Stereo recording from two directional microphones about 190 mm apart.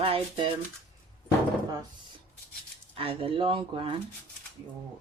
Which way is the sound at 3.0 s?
30° right (ahead or behind).